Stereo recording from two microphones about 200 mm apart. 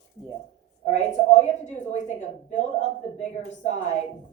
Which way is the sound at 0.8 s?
35° left (ahead or behind).